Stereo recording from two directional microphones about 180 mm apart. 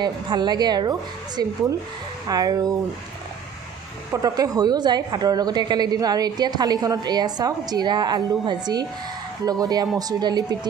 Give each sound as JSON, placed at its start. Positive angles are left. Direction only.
{"t": 0.0, "sound": "a woman's voice", "side_deg": -25}
{"t": 4.1, "sound": "a woman's voice", "side_deg": -20}